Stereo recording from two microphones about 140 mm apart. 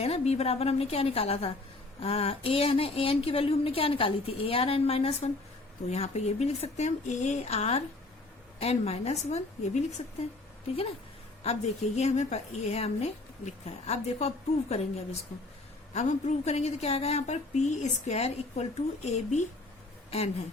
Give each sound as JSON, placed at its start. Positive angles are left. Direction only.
{"t": 0.0, "sound": "a woman's voice", "side_deg": 45}
{"t": 11.4, "sound": "a woman's voice", "side_deg": 50}